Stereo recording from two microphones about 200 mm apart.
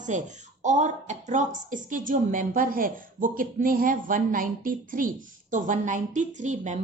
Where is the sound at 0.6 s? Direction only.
35° right (ahead or behind).